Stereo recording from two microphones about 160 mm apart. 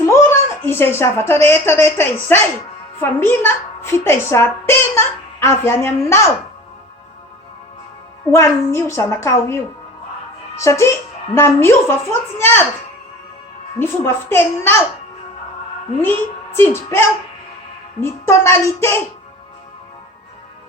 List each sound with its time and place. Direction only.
0.0 s a woman's voice: 15° left (ahead or behind)
8.3 s a woman's voice: 15° left (ahead or behind)
10.6 s a woman's voice: 15° left (ahead or behind)
13.7 s a woman's voice: 15° left (ahead or behind)
16.0 s a woman's voice: 15° left (ahead or behind)